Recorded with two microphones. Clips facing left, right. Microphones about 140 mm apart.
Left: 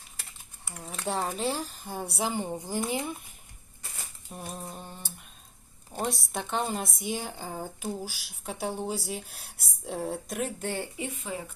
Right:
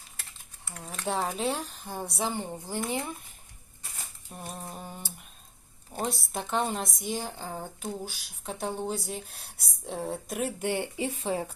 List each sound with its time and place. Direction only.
0.2 s typing: 5° left (ahead or behind)
1.0 s a woman's voice: centre (ahead or behind)
4.3 s a woman's voice: centre (ahead or behind)
10.6 s speech: 15° right (ahead or behind)
10.9 s speech: 30° right (ahead or behind)